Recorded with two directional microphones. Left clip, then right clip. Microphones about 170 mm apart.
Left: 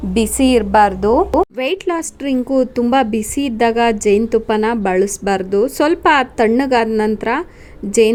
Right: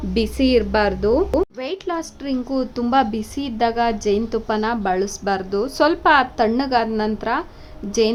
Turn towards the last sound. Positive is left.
turn(degrees=-5)  # may be behind; listen again after turning